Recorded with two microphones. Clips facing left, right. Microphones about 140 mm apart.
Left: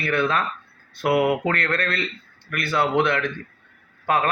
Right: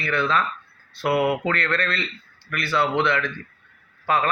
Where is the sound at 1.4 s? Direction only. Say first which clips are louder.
Left 1 dB; 50° left (ahead or behind).